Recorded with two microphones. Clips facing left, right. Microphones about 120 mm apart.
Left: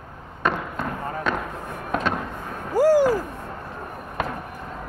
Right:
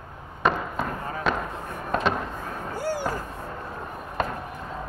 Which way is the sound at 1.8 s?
Centre (ahead or behind).